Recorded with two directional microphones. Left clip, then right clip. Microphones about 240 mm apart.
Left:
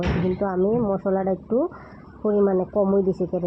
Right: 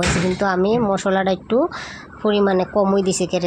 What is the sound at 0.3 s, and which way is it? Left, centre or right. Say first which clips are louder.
Speech: right 3 dB; right.